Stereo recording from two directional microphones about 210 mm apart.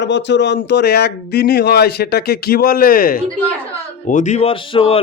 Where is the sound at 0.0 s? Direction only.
55° left (ahead or behind).